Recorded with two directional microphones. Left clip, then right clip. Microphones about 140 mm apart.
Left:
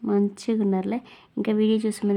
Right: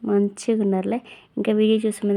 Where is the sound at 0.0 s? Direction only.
10° right (ahead or behind).